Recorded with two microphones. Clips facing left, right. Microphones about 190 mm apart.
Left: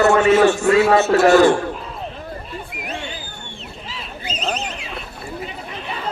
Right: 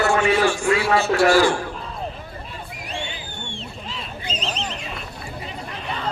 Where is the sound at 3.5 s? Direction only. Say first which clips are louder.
Even; 5° left (ahead or behind).